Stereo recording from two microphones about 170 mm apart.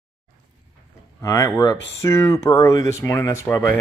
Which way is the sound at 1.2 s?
20° left (ahead or behind).